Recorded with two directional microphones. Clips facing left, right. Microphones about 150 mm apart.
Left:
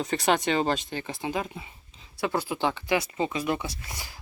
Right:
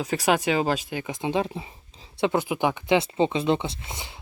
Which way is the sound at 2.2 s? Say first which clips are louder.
Right 4 dB; 20° right (ahead or behind).